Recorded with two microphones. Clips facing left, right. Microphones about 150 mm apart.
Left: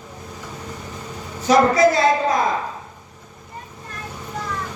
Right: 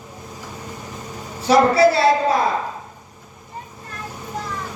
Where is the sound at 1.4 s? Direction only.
30° right (ahead or behind).